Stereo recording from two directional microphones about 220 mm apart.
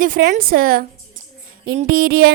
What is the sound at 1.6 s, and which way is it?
Music, 40° right (ahead or behind).